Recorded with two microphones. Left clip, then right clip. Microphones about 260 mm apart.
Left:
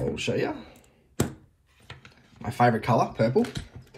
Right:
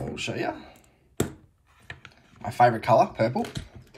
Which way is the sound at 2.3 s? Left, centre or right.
Centre.